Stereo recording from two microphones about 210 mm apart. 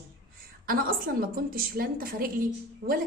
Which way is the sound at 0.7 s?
45° right (ahead or behind).